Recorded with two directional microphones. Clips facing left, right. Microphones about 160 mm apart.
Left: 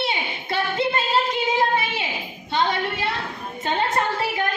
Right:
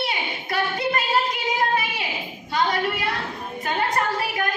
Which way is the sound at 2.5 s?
25° left (ahead or behind).